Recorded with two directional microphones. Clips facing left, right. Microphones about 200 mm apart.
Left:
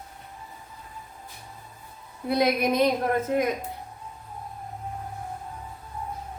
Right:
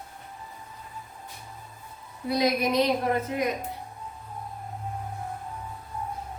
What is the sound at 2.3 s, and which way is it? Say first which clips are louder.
A woman's voice: left 1 dB; 55° left (ahead or behind).